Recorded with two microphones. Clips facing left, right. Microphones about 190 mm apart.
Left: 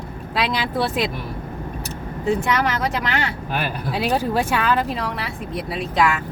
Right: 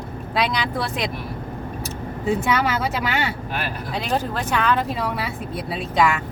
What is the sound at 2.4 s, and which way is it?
Speech, 5° right (ahead or behind).